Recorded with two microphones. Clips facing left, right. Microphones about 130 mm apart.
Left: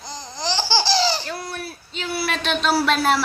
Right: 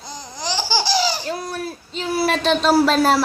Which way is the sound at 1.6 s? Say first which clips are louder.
Right 4 dB; 40° right (ahead or behind).